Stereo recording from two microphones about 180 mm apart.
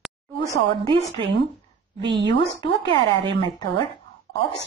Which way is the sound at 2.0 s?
75° right (ahead or behind).